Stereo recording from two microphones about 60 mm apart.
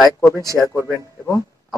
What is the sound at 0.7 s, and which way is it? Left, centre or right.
Speech, right.